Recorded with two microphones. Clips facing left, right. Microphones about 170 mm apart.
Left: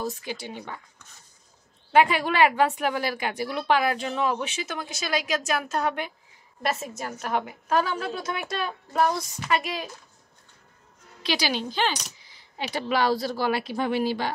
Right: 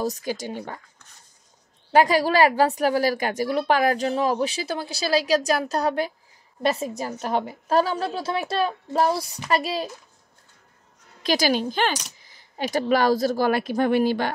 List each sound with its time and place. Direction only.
0.0 s speech: 40° right (ahead or behind)
1.9 s speech: 35° right (ahead or behind)
11.2 s speech: 45° right (ahead or behind)